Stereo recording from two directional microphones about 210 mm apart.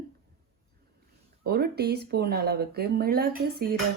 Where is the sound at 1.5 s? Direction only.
50° right (ahead or behind).